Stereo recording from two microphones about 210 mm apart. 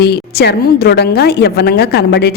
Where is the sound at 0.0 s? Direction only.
50° left (ahead or behind).